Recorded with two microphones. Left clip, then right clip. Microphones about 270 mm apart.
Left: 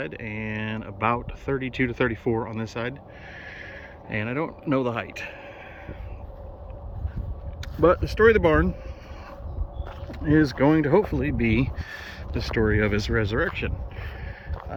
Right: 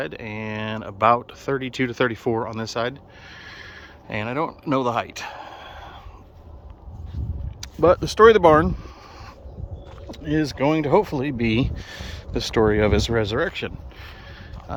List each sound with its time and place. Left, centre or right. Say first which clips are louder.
0.0 s speech: right 3 dB; centre
4.1 s speech: right 3 dB; centre
7.8 s speech: right 4 dB; right
10.1 s speech: left 3 dB; centre